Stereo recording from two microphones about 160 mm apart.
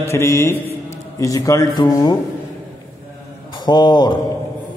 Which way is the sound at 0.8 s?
20° left (ahead or behind).